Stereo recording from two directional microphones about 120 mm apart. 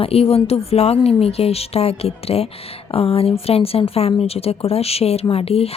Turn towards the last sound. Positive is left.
turn(degrees=55)  # may be behind; listen again after turning